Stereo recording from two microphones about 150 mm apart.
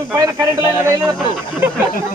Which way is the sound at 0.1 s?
20° right (ahead or behind).